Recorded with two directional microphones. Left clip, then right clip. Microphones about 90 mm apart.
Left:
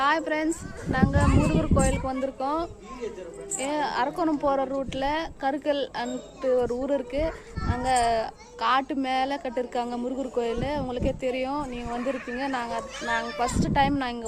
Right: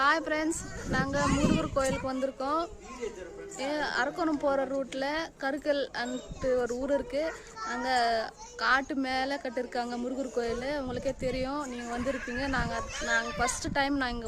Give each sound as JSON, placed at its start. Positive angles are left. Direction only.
{"t": 0.0, "sound": "a child's voice", "side_deg": -45}
{"t": 3.6, "sound": "a woman's voice", "side_deg": -30}